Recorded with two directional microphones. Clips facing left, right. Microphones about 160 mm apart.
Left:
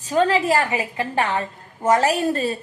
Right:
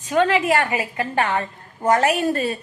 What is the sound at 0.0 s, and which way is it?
A woman's voice, 35° left (ahead or behind).